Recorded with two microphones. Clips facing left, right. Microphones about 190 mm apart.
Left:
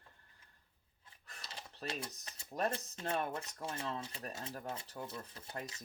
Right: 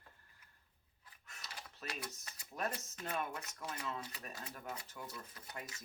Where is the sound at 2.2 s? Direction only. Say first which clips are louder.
Left 5 dB; 30° left (ahead or behind).